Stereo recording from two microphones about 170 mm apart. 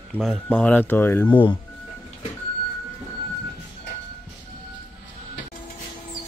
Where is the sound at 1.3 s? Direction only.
30° left (ahead or behind).